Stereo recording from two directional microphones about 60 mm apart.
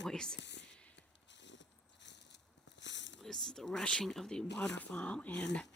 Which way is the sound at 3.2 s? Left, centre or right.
Centre.